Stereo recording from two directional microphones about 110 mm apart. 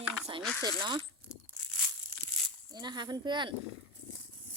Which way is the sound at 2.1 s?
20° right (ahead or behind).